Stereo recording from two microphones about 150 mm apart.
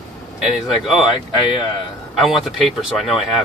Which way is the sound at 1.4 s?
30° left (ahead or behind).